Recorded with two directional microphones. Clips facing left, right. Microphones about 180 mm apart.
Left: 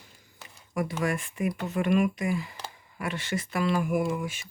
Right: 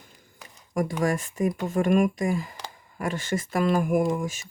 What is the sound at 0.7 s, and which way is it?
Speech, 45° right (ahead or behind).